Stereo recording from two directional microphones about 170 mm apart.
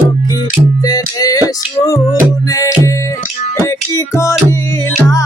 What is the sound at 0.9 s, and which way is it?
Music, 20° left (ahead or behind).